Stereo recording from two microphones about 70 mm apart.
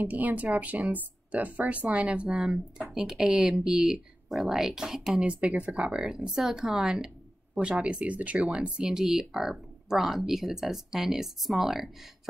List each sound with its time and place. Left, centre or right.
0.0 s speech: right; by 11.9 s centre